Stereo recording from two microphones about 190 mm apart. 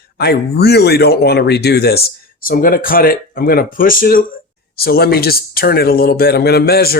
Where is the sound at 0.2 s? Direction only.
60° left (ahead or behind).